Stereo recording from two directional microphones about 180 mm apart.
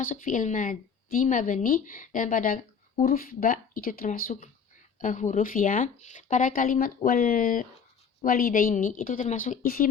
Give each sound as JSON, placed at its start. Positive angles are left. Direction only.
{"t": 0.0, "sound": "speech", "side_deg": 50}